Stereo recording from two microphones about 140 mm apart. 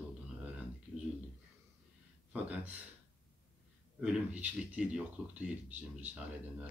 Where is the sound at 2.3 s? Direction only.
10° right (ahead or behind).